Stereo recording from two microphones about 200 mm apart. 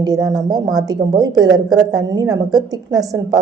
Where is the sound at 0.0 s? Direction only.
20° right (ahead or behind).